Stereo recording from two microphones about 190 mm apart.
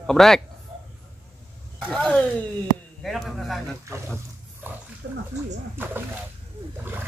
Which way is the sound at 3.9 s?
15° right (ahead or behind).